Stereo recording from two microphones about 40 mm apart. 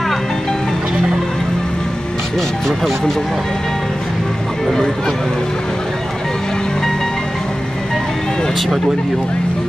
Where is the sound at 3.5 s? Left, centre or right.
Centre.